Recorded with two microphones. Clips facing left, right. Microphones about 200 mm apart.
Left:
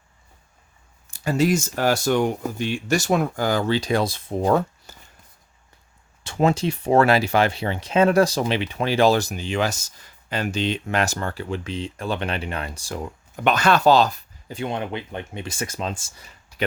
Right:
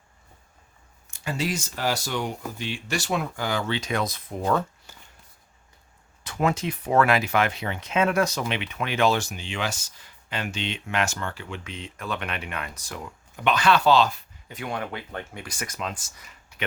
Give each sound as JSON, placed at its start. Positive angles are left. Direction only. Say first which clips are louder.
{"t": 1.0, "sound": "speech", "louder": "left 8 dB", "side_deg": 35}
{"t": 6.2, "sound": "speech", "louder": "left 5 dB", "side_deg": 30}
{"t": 13.3, "sound": "speech", "louder": "left 2 dB", "side_deg": 45}